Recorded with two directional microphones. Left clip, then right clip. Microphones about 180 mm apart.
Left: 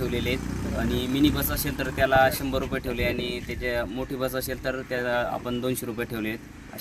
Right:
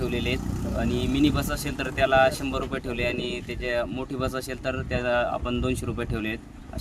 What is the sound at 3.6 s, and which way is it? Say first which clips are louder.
Speech: right 1 dB; centre (ahead or behind).